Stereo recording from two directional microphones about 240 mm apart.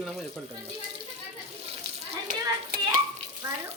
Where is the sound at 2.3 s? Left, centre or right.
Right.